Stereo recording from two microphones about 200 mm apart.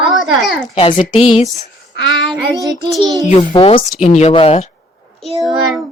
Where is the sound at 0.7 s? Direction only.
35° left (ahead or behind).